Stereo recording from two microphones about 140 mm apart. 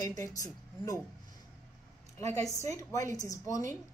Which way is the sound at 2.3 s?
25° left (ahead or behind).